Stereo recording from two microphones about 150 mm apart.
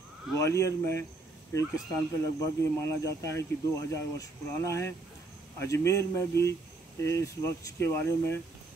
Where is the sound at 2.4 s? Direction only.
20° left (ahead or behind).